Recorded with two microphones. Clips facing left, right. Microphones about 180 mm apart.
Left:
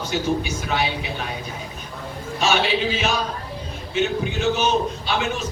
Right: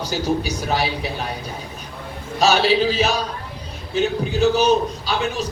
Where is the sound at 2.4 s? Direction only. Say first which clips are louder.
Right 4 dB; 35° right (ahead or behind).